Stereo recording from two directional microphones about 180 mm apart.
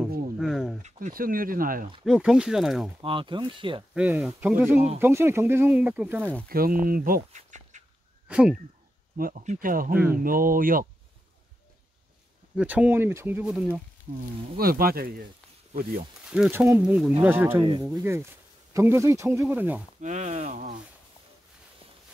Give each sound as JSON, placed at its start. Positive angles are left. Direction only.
{"t": 0.4, "sound": "a sound", "side_deg": 0}
{"t": 0.8, "sound": "speech", "side_deg": -45}
{"t": 2.0, "sound": "speech", "side_deg": -5}
{"t": 3.0, "sound": "speech", "side_deg": -30}
{"t": 3.9, "sound": "speech", "side_deg": -5}
{"t": 6.5, "sound": "speech", "side_deg": -55}
{"t": 8.3, "sound": "speech", "side_deg": -5}
{"t": 9.1, "sound": "speech", "side_deg": -50}
{"t": 12.5, "sound": "speech", "side_deg": -5}
{"t": 14.1, "sound": "speech", "side_deg": -50}
{"t": 16.3, "sound": "speech", "side_deg": -5}
{"t": 16.8, "sound": "speech", "side_deg": -5}
{"t": 20.0, "sound": "speech", "side_deg": -40}